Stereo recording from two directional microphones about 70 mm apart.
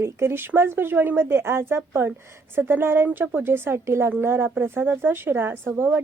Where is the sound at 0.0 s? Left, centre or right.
Right.